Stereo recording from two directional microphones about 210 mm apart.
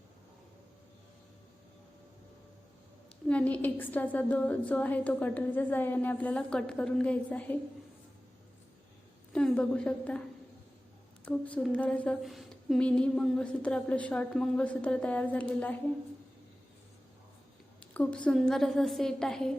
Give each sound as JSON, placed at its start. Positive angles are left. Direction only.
{"t": 3.2, "sound": "a woman's voice", "side_deg": 5}
{"t": 9.3, "sound": "a woman's voice", "side_deg": 5}
{"t": 11.3, "sound": "a woman's voice", "side_deg": 5}
{"t": 17.9, "sound": "a woman's voice", "side_deg": 5}